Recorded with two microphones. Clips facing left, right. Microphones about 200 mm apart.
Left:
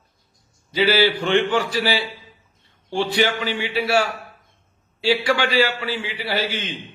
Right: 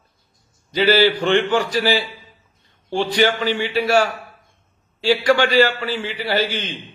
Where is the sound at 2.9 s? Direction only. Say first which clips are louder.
Right 2 dB; 5° left (ahead or behind).